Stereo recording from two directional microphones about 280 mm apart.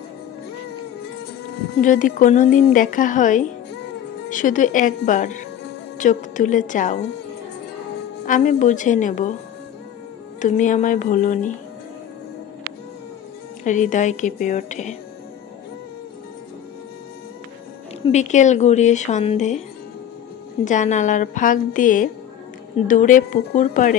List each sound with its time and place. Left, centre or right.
1.8 s speech: left
8.3 s speech: left
10.4 s speech: left
13.7 s speech: left
18.0 s speech: left
20.6 s speech: left